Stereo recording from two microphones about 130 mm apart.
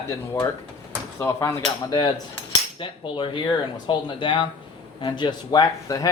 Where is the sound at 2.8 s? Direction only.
40° left (ahead or behind).